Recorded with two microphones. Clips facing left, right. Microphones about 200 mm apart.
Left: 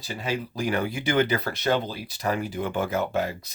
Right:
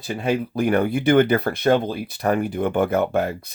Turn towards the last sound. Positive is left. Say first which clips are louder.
# right 5 dB
turn(degrees=-55)  # may be behind; listen again after turning